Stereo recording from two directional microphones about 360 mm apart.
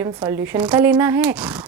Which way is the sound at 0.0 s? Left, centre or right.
Centre.